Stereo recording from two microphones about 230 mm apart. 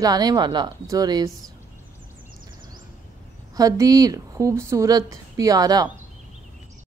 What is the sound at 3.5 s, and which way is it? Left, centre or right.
A woman's voice, centre.